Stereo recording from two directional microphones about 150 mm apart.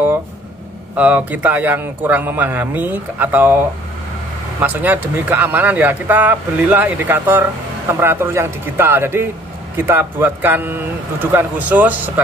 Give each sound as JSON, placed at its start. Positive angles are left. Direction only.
{"t": 0.9, "sound": "speech", "side_deg": -10}
{"t": 4.6, "sound": "speech", "side_deg": -10}